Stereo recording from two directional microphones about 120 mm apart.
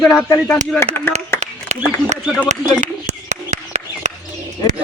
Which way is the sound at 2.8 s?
80° right.